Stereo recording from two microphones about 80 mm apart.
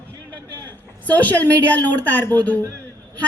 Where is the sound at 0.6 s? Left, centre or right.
Left.